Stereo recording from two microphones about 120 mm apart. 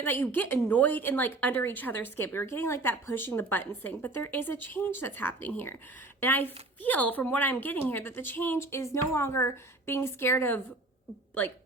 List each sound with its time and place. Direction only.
0.0 s speech: 15° left (ahead or behind)